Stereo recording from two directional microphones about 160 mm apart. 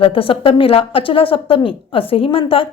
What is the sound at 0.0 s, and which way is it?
A woman's voice, 35° left (ahead or behind).